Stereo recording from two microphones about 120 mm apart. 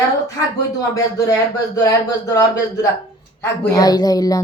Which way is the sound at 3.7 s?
30° left (ahead or behind).